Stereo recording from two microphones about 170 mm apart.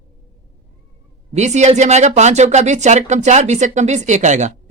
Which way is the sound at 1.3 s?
45° right (ahead or behind).